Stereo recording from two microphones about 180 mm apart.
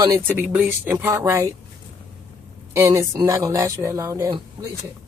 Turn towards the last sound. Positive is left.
turn(degrees=-15)  # may be behind; listen again after turning